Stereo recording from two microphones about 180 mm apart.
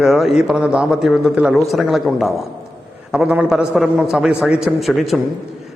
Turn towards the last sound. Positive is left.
turn(degrees=0)  # may be behind; listen again after turning